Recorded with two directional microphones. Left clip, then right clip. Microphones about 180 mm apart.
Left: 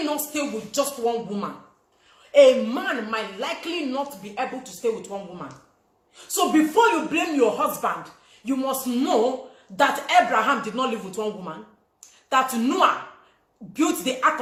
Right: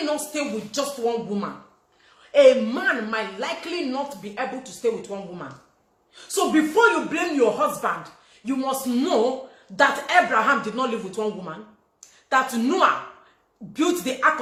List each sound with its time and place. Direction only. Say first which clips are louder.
0.0 s speech: right 1 dB; 15° right (ahead or behind)
11.9 s a sound: even; 15° right (ahead or behind)
13.7 s speech: even; 10° right (ahead or behind)